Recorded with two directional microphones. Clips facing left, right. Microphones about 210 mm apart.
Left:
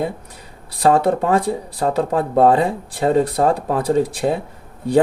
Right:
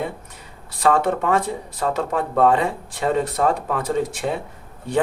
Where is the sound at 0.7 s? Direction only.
35° left (ahead or behind).